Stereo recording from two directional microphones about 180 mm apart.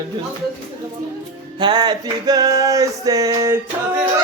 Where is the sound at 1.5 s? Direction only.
25° right (ahead or behind).